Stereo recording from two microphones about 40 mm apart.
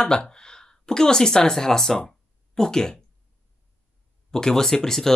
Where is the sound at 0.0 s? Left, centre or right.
Left.